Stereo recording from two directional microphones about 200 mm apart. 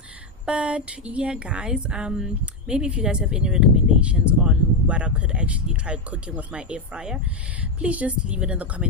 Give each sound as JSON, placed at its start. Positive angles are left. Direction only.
{"t": 0.4, "sound": "a woman's voice", "side_deg": -5}